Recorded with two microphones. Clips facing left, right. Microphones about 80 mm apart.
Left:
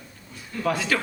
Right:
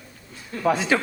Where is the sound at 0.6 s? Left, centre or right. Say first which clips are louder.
Right 4 dB; right.